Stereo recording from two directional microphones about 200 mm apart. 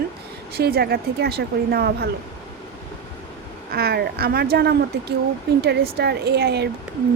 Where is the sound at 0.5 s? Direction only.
50° right (ahead or behind).